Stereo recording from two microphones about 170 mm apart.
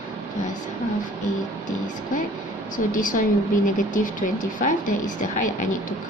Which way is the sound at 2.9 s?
50° left (ahead or behind).